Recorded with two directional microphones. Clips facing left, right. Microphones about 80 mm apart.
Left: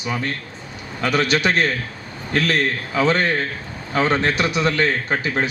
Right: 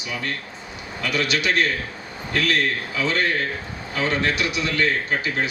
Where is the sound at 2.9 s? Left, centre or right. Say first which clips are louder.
Left 5 dB; left.